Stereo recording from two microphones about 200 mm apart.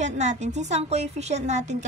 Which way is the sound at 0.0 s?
35° right (ahead or behind).